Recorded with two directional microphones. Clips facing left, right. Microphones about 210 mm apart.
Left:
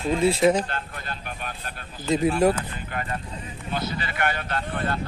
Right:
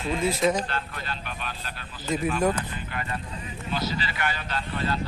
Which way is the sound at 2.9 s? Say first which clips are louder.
Left 4 dB; 45° left (ahead or behind).